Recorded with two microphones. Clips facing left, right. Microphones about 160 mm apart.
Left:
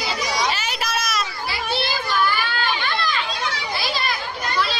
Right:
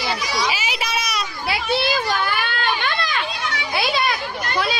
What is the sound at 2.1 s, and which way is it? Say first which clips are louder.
Children playing: left 1 dB; 60° right (ahead or behind).